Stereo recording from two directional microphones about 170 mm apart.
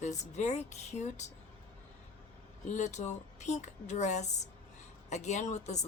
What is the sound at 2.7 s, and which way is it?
Speech, 45° left (ahead or behind).